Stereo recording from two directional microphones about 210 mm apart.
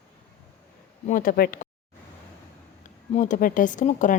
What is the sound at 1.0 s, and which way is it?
Speech, 40° left (ahead or behind).